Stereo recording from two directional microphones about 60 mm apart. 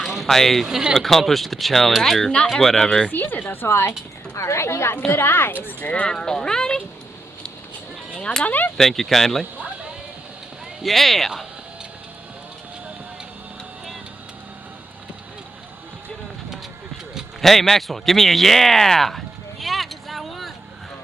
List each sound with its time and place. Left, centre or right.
0.0 s speech: centre
3.1 s speech: left
5.8 s speech: left
6.1 s speech: centre
8.2 s speech: centre
8.4 s speech: left
8.8 s speech: centre
10.8 s speech: centre
17.4 s a sound: centre